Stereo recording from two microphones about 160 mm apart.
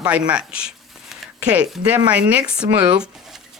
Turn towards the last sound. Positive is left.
turn(degrees=-5)  # may be behind; listen again after turning